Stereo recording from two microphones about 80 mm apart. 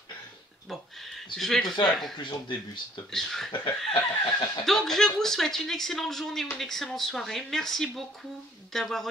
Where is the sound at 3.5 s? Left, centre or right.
Left.